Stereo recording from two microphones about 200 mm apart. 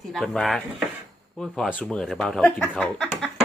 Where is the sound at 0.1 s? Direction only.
Centre (ahead or behind).